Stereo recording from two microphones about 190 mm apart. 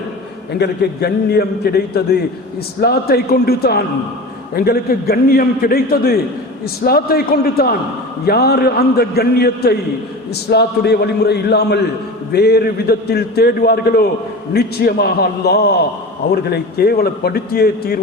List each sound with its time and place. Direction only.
0.6 s a man's voice: 60° left (ahead or behind)